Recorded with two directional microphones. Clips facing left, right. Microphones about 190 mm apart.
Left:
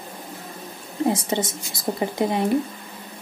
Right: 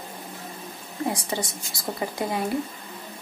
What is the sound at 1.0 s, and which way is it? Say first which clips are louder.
A woman's voice: left 6 dB; 20° left (ahead or behind).